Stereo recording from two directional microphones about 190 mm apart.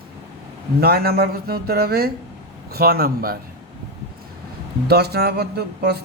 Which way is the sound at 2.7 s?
50° right (ahead or behind).